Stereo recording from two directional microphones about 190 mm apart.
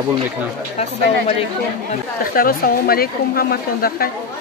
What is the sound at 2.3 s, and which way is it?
A woman's voice, 50° left (ahead or behind).